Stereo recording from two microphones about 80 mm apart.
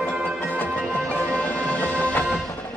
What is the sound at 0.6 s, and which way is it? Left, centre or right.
Music, centre.